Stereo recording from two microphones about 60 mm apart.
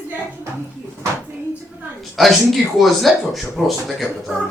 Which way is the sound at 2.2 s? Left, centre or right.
Centre.